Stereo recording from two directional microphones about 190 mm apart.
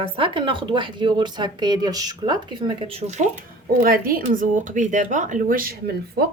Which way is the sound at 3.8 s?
50° right (ahead or behind).